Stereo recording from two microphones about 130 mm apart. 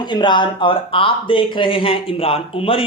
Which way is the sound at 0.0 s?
35° left (ahead or behind).